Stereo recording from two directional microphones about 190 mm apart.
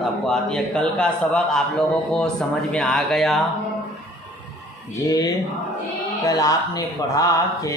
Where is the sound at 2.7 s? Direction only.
Centre (ahead or behind).